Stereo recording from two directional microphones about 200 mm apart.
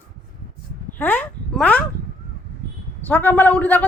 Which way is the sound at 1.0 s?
10° left (ahead or behind).